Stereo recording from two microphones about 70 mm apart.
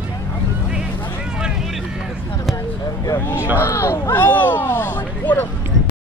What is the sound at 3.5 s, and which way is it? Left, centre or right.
Speech, left.